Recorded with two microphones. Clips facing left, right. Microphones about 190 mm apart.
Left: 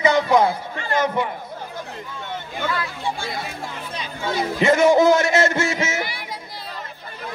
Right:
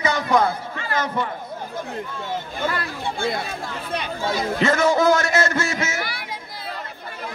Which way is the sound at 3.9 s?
60° right (ahead or behind).